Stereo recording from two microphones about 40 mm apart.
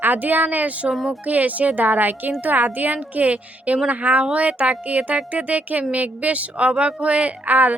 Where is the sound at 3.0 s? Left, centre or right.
Right.